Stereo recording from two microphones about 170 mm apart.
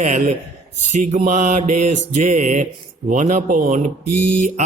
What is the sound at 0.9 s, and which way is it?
Speech, 45° right (ahead or behind).